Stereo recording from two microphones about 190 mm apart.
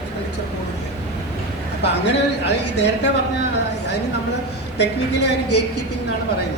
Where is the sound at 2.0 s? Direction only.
65° left (ahead or behind).